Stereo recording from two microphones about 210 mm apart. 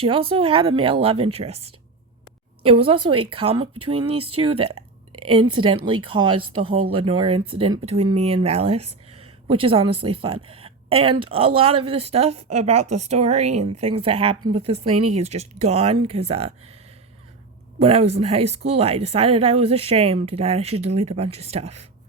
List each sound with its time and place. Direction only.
0.0 s speech: 25° right (ahead or behind)
2.6 s speech: 25° right (ahead or behind)
17.7 s speech: 30° right (ahead or behind)